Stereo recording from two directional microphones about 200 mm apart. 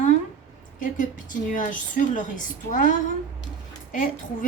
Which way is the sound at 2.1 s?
40° left (ahead or behind).